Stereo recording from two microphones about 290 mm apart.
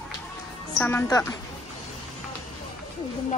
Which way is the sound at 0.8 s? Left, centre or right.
Centre.